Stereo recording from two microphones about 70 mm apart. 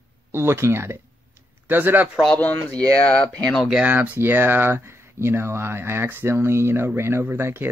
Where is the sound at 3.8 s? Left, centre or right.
Right.